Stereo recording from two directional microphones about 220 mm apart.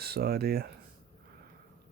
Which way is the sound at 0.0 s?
45° right (ahead or behind).